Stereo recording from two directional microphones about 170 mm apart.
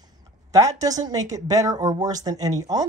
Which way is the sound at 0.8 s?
20° right (ahead or behind).